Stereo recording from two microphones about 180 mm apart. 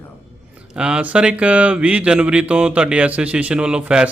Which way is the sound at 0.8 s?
5° right (ahead or behind).